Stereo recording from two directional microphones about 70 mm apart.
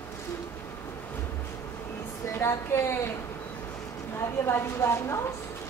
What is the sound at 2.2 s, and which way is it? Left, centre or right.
Speech, left.